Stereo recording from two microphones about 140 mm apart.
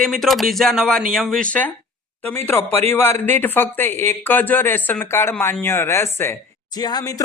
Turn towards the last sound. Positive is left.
turn(degrees=25)  # may be behind; listen again after turning